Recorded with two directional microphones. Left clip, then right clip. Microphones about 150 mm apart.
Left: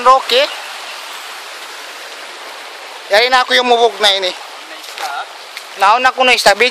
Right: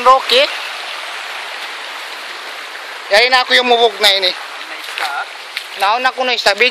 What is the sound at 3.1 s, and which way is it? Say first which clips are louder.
Speech: even; 10° left (ahead or behind).